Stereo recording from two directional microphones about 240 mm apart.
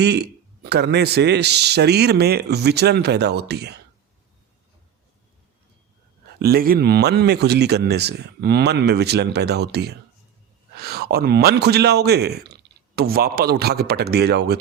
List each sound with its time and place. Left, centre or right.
0.0 s speech: right
6.4 s a man's voice: right